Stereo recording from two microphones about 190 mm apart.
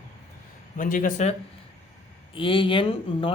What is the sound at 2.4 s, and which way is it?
Speech, 25° left (ahead or behind).